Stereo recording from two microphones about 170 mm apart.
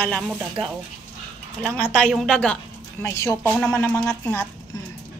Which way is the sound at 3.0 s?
15° left (ahead or behind).